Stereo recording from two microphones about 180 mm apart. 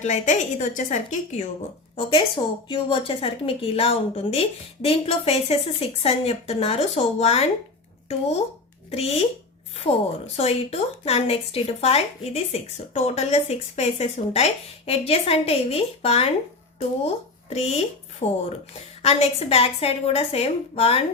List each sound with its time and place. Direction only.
0.0 s a woman's voice: 40° left (ahead or behind)
2.0 s a woman's voice: 30° left (ahead or behind)
8.9 s a woman's voice: 35° left (ahead or behind)
10.3 s a woman's voice: 35° left (ahead or behind)
17.5 s a woman's voice: 35° left (ahead or behind)